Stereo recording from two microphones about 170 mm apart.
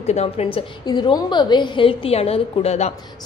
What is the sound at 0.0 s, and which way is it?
Speech, 40° left (ahead or behind).